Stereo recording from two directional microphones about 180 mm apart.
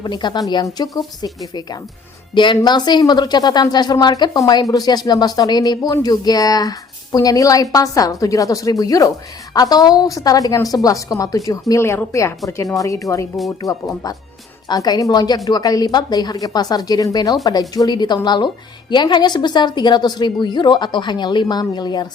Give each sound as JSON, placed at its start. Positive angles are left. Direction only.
{"t": 0.0, "sound": "speech", "side_deg": 25}
{"t": 2.3, "sound": "a woman's voice", "side_deg": 25}